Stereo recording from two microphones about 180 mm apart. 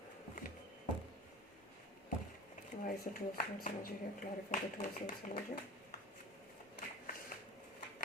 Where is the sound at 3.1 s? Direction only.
45° left (ahead or behind).